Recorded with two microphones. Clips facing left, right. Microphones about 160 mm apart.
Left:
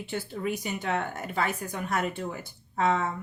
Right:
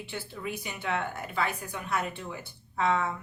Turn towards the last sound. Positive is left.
turn(degrees=40)  # may be behind; listen again after turning